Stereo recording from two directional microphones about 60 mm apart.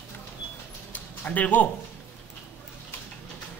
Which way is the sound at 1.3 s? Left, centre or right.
Left.